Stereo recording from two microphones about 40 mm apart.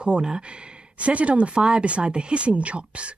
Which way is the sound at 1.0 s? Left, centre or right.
Right.